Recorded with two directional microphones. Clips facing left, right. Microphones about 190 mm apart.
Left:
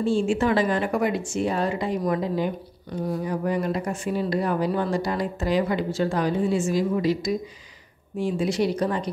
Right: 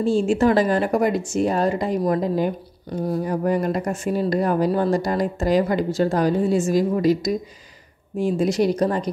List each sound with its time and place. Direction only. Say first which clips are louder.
0.0 s a woman's voice: right 4 dB; 40° right (ahead or behind)